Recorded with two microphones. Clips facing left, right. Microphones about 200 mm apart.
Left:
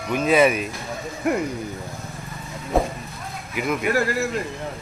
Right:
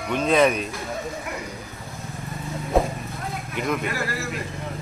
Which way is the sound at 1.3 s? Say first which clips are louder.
Left 12 dB; 50° left (ahead or behind).